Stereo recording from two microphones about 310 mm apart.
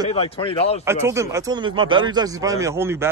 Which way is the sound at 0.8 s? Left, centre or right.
Centre.